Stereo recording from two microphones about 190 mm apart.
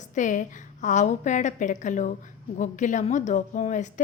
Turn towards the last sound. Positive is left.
turn(degrees=40)  # may be behind; listen again after turning